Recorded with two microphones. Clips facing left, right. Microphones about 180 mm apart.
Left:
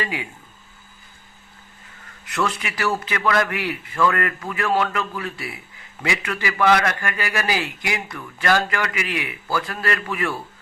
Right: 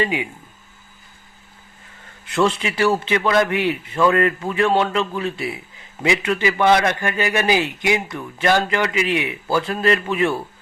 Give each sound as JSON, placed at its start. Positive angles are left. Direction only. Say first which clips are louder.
{"t": 0.0, "sound": "a man's voice", "louder": "right 6 dB", "side_deg": -20}
{"t": 2.2, "sound": "a man's voice", "louder": "right 6 dB", "side_deg": -25}